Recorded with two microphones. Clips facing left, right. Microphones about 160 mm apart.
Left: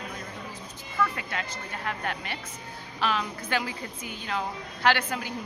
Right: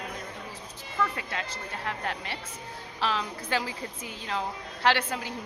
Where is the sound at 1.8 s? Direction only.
30° right (ahead or behind).